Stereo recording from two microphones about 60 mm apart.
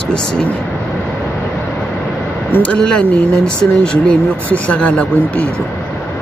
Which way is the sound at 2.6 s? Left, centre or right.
Centre.